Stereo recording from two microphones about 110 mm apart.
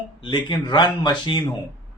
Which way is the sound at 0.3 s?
45° left (ahead or behind).